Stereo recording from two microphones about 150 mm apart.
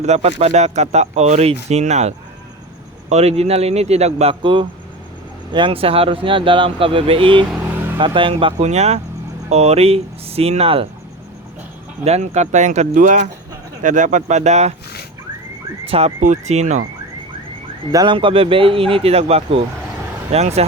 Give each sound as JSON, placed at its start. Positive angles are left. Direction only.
{"t": 0.0, "sound": "speech", "side_deg": -50}
{"t": 7.6, "sound": "vehicle", "side_deg": -15}
{"t": 7.9, "sound": "speech", "side_deg": -35}
{"t": 12.0, "sound": "speech", "side_deg": -45}
{"t": 15.9, "sound": "speech", "side_deg": -45}
{"t": 17.9, "sound": "speech", "side_deg": -30}